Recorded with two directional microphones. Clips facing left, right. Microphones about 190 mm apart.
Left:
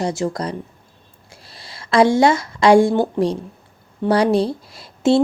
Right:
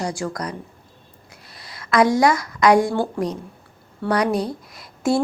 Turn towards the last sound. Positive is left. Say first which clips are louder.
# left 5 dB
turn(degrees=25)  # may be behind; listen again after turning